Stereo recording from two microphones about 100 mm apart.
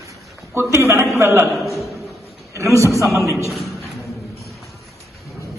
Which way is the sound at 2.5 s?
30° right (ahead or behind).